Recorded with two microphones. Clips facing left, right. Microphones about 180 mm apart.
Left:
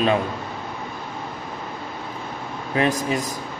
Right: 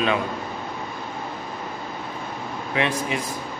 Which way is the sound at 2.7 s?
40° left (ahead or behind).